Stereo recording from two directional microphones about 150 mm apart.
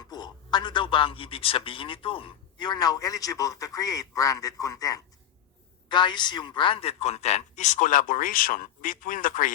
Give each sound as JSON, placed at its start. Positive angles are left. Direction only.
{"t": 0.1, "sound": "a man's voice", "side_deg": 30}